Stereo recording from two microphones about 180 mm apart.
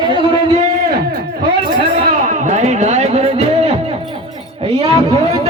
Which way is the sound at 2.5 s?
40° right (ahead or behind).